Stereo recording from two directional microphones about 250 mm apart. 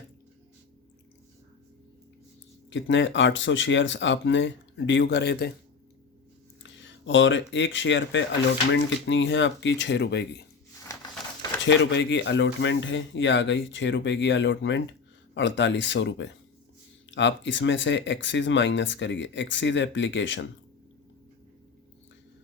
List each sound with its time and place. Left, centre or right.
2.6 s speech: left
6.6 s speech: left
11.6 s speech: left